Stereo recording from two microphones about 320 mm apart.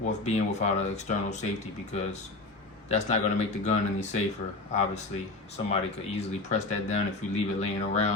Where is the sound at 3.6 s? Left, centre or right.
Left.